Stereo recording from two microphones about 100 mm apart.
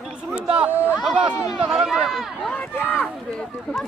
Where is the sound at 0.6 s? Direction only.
15° right (ahead or behind).